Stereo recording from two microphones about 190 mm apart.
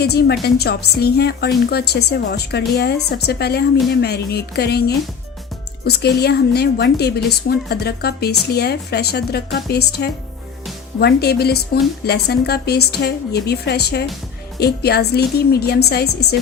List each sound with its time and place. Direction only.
0.0 s a woman's voice: 60° left (ahead or behind)